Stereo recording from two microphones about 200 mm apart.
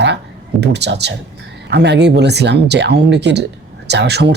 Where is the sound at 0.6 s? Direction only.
60° right (ahead or behind).